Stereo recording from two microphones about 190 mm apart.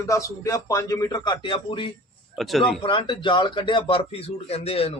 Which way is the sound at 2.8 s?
25° left (ahead or behind).